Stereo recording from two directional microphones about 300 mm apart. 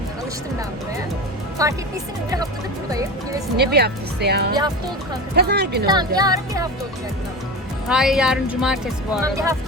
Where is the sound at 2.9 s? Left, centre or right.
Centre.